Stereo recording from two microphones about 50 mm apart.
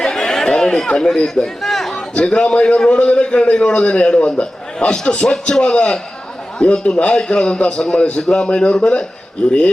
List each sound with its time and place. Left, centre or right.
0.0 s chatter: centre
1.6 s chatter: centre
2.0 s a man's voice: centre